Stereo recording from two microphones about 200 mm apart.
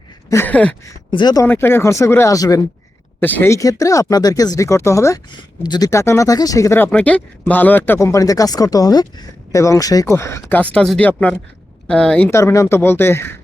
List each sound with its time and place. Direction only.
0.3 s speech: 10° left (ahead or behind)
1.1 s speech: 20° left (ahead or behind)